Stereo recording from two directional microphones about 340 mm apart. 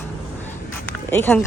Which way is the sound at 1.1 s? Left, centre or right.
Centre.